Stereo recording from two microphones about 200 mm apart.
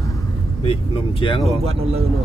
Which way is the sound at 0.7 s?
25° left (ahead or behind).